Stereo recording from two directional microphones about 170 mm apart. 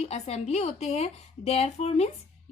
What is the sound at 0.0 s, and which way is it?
Speech, 40° left (ahead or behind).